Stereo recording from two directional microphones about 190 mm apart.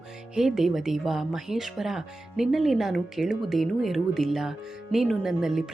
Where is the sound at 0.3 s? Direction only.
Centre (ahead or behind).